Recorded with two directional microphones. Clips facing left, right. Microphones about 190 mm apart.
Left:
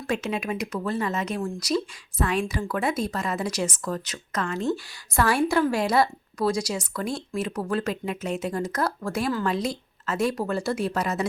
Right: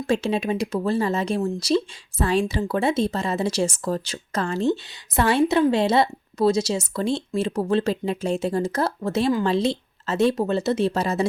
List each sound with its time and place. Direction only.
0.1 s a woman's voice: 30° right (ahead or behind)